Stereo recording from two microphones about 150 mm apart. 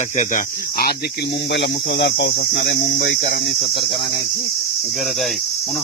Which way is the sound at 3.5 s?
35° left (ahead or behind).